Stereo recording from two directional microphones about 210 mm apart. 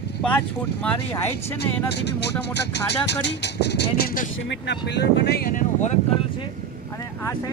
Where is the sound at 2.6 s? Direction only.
55° left (ahead or behind).